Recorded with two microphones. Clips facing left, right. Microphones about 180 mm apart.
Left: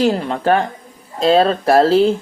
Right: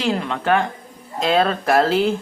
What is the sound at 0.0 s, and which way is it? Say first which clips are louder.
Speech: left 5 dB; 40° left (ahead or behind).